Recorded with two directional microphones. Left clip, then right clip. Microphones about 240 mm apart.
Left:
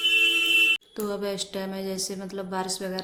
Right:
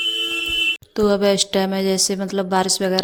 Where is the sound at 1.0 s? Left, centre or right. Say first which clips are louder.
Right 13 dB; right.